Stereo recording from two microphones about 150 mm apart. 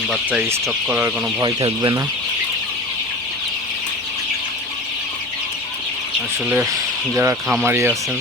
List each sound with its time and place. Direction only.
0.3 s speech: 15° right (ahead or behind)
1.4 s speech: 25° right (ahead or behind)
6.5 s speech: 20° right (ahead or behind)